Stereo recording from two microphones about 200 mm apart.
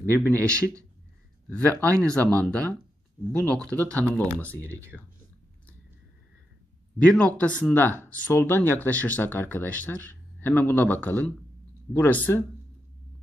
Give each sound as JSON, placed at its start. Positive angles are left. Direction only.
{"t": 0.0, "sound": "speech", "side_deg": 10}
{"t": 0.4, "sound": "a man's voice", "side_deg": -15}
{"t": 1.5, "sound": "speech", "side_deg": 10}
{"t": 7.1, "sound": "speech", "side_deg": 5}